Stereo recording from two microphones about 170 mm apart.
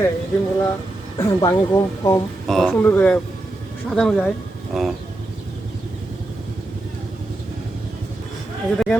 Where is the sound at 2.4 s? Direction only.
Centre (ahead or behind).